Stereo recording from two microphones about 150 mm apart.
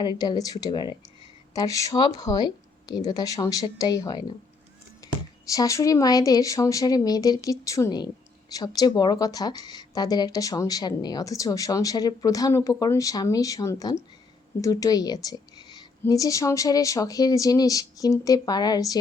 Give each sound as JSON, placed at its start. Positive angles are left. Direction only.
{"t": 0.0, "sound": "a woman's voice", "side_deg": 25}
{"t": 5.5, "sound": "a woman's voice", "side_deg": 20}